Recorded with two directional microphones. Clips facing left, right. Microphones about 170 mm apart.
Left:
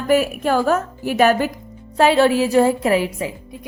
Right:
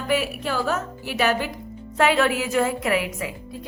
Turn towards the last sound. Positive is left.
turn(degrees=30)  # may be behind; listen again after turning